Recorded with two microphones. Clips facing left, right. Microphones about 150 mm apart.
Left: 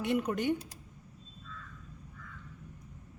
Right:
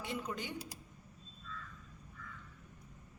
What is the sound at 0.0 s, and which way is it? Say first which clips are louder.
Speech: left 11 dB; 65° left (ahead or behind).